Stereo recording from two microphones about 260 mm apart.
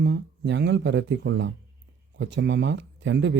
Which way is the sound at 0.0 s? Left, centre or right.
Right.